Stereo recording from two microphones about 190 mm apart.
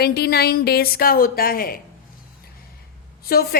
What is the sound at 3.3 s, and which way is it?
Speech, 55° left (ahead or behind).